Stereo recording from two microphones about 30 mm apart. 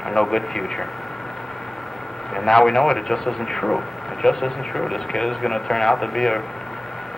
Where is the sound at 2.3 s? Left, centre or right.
Centre.